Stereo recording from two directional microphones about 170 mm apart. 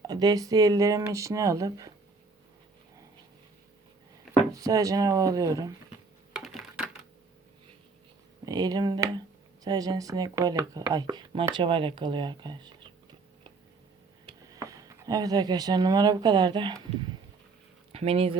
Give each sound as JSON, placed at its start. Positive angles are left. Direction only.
{"t": 0.1, "sound": "speech", "side_deg": -25}
{"t": 4.5, "sound": "speech", "side_deg": -20}
{"t": 6.3, "sound": "a sound", "side_deg": 0}
{"t": 8.4, "sound": "speech", "side_deg": -20}
{"t": 14.3, "sound": "speech", "side_deg": -20}
{"t": 17.9, "sound": "speech", "side_deg": -35}